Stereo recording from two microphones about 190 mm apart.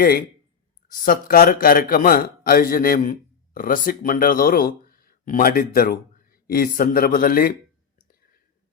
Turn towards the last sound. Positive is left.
turn(degrees=50)  # may be behind; listen again after turning